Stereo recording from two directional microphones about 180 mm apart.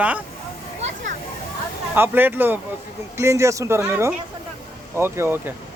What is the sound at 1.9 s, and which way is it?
Speech, 10° right (ahead or behind).